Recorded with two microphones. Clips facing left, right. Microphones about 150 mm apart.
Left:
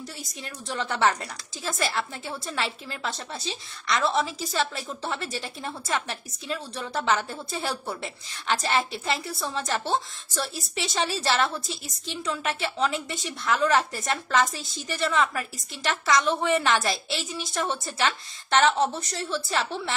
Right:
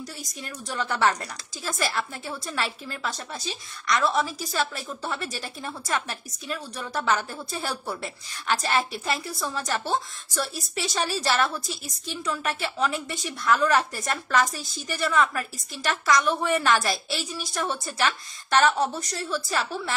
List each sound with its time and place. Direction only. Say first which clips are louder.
0.0 s a woman's voice: right 1 dB; 25° left (ahead or behind)